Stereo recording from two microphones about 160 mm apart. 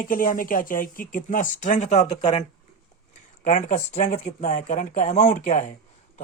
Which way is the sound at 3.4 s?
50° left (ahead or behind).